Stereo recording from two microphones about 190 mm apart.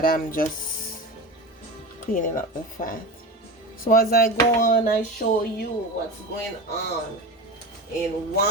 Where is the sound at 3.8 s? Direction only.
50° left (ahead or behind).